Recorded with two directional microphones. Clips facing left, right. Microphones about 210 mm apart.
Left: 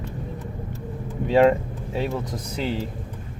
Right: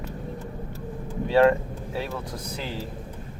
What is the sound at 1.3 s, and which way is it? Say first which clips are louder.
Speech: left 2 dB; 20° left (ahead or behind).